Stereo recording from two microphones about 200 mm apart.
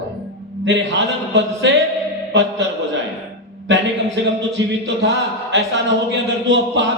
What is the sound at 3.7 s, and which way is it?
A man's voice, 65° right (ahead or behind).